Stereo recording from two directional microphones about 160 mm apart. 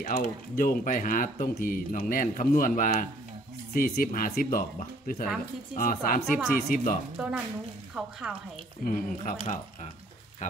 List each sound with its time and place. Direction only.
0.0 s speech: 60° left (ahead or behind)
7.2 s speech: 5° right (ahead or behind)
8.8 s speech: 60° left (ahead or behind)